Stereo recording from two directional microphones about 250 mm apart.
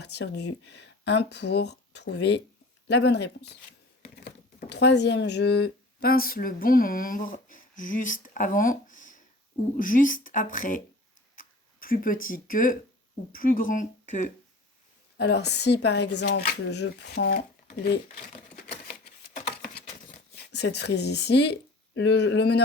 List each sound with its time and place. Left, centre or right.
0.0 s speech: left
4.1 s typing: left
6.0 s speech: left
15.2 s speech: left
19.7 s a sound: left
21.9 s speech: left